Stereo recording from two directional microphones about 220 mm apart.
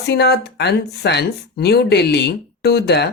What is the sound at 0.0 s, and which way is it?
Speech, 50° left (ahead or behind).